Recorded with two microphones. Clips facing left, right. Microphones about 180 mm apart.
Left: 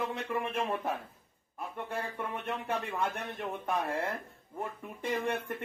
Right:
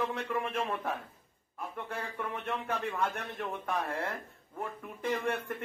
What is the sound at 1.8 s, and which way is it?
Speech, 15° left (ahead or behind).